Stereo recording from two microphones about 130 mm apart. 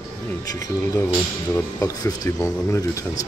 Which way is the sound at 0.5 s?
25° left (ahead or behind).